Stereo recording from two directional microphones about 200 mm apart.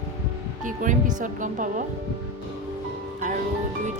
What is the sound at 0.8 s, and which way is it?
Speech, 40° right (ahead or behind).